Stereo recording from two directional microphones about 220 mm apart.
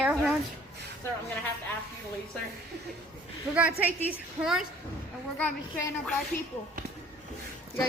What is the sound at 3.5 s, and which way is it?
Speech, 5° right (ahead or behind).